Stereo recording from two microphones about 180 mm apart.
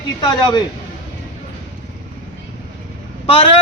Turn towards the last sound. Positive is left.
turn(degrees=30)  # may be behind; listen again after turning